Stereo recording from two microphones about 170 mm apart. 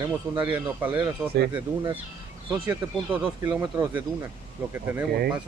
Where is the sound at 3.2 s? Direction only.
10° right (ahead or behind).